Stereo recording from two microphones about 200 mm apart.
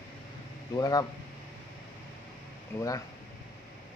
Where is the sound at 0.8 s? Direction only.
20° left (ahead or behind).